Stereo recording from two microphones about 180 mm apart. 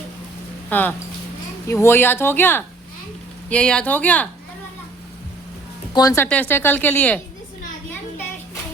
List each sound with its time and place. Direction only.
0.7 s speech: 10° left (ahead or behind)
5.9 s speech: 20° left (ahead or behind)
6.2 s speech: 10° left (ahead or behind)